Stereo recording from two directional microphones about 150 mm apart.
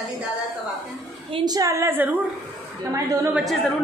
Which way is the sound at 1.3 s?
25° right (ahead or behind).